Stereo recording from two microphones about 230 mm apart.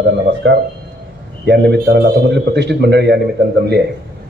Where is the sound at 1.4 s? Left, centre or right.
Right.